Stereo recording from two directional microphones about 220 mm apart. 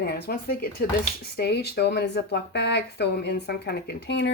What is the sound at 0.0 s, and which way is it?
Speech, 45° left (ahead or behind).